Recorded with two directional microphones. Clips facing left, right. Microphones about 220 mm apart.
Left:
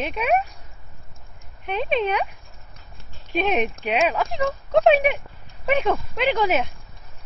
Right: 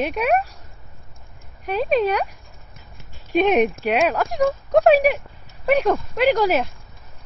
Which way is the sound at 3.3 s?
5° right (ahead or behind).